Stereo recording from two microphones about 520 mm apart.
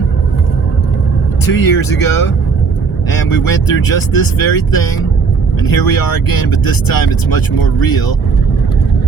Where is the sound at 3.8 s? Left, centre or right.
Left.